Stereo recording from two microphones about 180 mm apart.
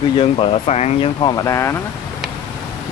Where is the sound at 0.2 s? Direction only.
35° left (ahead or behind).